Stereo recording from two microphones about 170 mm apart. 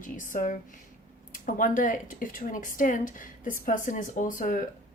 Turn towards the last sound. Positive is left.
turn(degrees=50)  # may be behind; listen again after turning